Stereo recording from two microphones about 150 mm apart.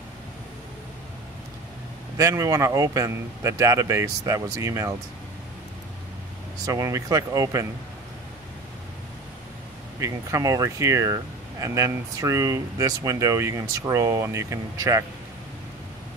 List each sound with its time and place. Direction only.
2.1 s speech: 20° right (ahead or behind)
6.6 s speech: 20° right (ahead or behind)
9.9 s speech: 20° right (ahead or behind)